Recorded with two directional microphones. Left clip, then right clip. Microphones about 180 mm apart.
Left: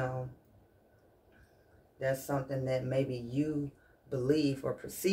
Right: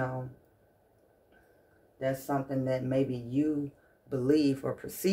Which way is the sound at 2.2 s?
40° right (ahead or behind).